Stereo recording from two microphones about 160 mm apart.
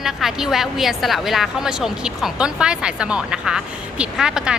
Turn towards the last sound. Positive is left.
turn(degrees=-5)  # may be behind; listen again after turning